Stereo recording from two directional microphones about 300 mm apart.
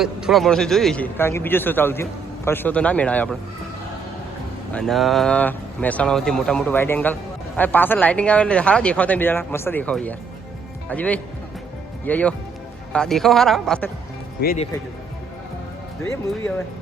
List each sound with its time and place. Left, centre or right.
0.0 s speech: centre
4.7 s a man's voice: centre
14.4 s speech: left